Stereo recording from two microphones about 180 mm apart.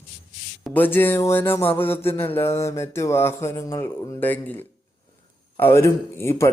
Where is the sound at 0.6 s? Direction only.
10° left (ahead or behind).